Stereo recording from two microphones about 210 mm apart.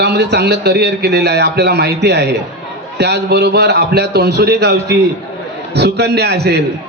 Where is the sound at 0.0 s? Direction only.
55° right (ahead or behind).